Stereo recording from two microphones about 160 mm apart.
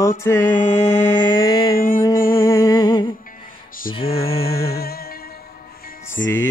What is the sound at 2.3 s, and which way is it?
Music, 15° left (ahead or behind).